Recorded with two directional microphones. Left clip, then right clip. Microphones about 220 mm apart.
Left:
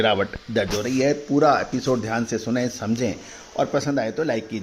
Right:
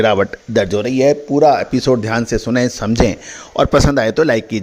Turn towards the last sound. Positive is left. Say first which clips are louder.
# right 10 dB
turn(degrees=-45)  # may be behind; listen again after turning